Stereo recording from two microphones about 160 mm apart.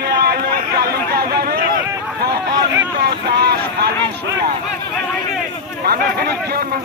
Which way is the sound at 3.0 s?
90° right.